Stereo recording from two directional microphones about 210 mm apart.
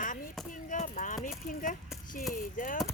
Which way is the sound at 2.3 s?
40° left (ahead or behind).